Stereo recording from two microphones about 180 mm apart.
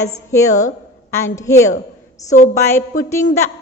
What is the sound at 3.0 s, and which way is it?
Speech, 15° left (ahead or behind).